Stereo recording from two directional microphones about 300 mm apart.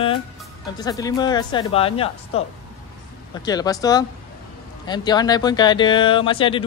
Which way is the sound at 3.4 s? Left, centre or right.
Centre.